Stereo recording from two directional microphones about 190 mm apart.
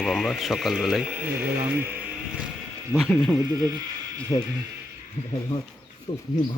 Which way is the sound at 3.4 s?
20° right (ahead or behind).